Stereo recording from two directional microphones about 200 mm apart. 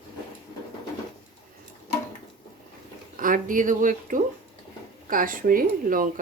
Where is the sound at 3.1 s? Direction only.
40° right (ahead or behind).